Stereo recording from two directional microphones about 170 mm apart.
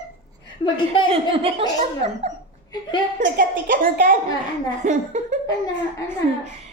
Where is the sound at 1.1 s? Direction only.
35° right (ahead or behind).